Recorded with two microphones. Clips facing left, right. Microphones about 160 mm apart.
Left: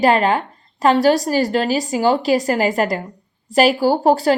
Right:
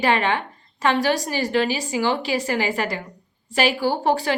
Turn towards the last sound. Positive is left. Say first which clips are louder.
# left 6 dB
turn(degrees=40)  # may be behind; listen again after turning